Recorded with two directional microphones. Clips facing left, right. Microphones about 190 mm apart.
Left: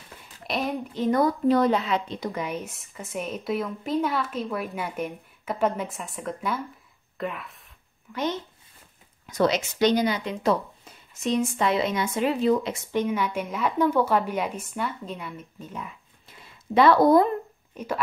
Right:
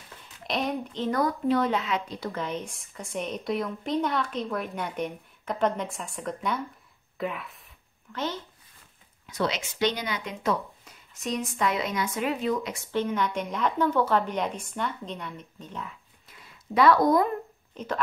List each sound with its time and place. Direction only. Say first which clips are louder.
0.5 s speech: left 1 dB; centre (ahead or behind)
1.2 s speech: left 3 dB; 40° left (ahead or behind)
2.1 s speech: left 2 dB; 15° left (ahead or behind)
8.1 s a woman's voice: left 4 dB; 15° left (ahead or behind)
9.3 s speech: left 6 dB; 45° left (ahead or behind)
12.9 s a woman's voice: left 1 dB; 10° left (ahead or behind)
16.3 s a sound: left 4 dB; 25° left (ahead or behind)
17.7 s a woman's voice: left 1 dB; 10° left (ahead or behind)